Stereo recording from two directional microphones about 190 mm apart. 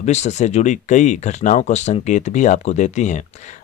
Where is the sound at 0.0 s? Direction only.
35° left (ahead or behind).